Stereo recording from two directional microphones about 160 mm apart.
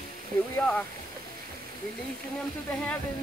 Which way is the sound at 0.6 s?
5° left (ahead or behind).